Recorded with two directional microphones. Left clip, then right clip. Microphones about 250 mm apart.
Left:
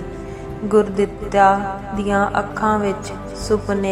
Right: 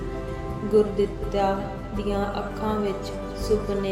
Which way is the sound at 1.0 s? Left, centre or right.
Centre.